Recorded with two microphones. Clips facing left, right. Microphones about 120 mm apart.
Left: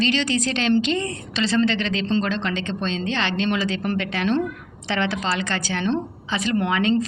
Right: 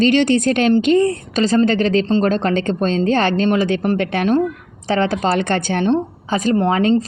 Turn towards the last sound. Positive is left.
turn(degrees=-40)  # may be behind; listen again after turning